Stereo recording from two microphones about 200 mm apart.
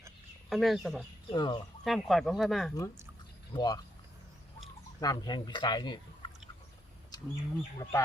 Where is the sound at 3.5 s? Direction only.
20° left (ahead or behind).